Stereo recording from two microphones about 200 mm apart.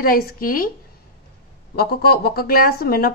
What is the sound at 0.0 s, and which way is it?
Speech, 45° left (ahead or behind).